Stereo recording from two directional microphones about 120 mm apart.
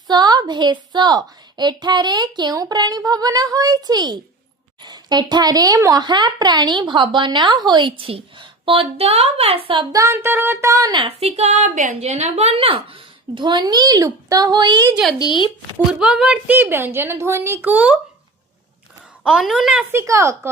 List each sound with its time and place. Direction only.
0.1 s speech: 35° right (ahead or behind)
9.9 s speech: 25° right (ahead or behind)
11.0 s a woman's voice: 60° right (ahead or behind); by 14.8 s 35° right (ahead or behind)
15.2 s speech: 40° left (ahead or behind)
15.9 s a woman's voice: 5° right (ahead or behind)
19.2 s a woman's voice: 5° right (ahead or behind)
19.9 s speech: 25° right (ahead or behind)